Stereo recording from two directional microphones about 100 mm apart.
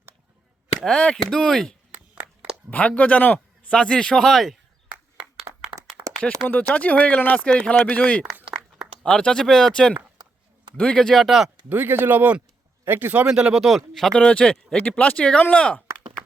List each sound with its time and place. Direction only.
0.9 s a man's voice: 5° left (ahead or behind)
1.9 s a sound: 15° right (ahead or behind)
2.6 s a man's voice: 15° left (ahead or behind)
5.5 s clapping: 40° right (ahead or behind)
6.1 s a sound: 35° right (ahead or behind)
6.5 s a man's voice: 15° left (ahead or behind); by 11.5 s centre (ahead or behind)
11.7 s speech: 20° right (ahead or behind)
13.2 s a man's voice: 5° right (ahead or behind); by 15.8 s 15° left (ahead or behind)